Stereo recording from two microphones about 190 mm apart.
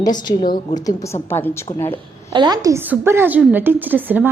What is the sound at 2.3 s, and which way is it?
A woman's voice, 20° right (ahead or behind).